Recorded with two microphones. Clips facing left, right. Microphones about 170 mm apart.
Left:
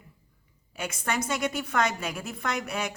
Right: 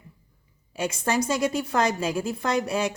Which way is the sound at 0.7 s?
30° right (ahead or behind).